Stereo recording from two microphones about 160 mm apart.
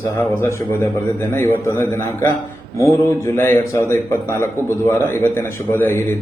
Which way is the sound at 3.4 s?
15° left (ahead or behind).